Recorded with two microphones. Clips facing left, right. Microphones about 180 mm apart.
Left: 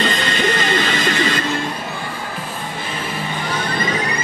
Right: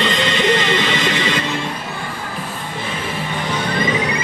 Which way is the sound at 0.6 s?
45° left (ahead or behind).